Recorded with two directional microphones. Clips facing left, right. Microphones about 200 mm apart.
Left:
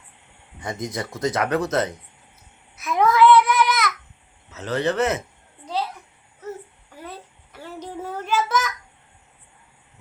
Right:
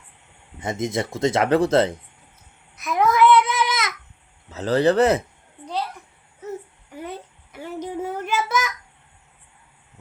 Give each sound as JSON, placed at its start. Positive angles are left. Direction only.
{"t": 0.6, "sound": "speech", "side_deg": -25}
{"t": 2.7, "sound": "a sound", "side_deg": 0}
{"t": 3.1, "sound": "child singing", "side_deg": -15}
{"t": 4.5, "sound": "speech", "side_deg": -35}
{"t": 7.0, "sound": "child singing", "side_deg": -15}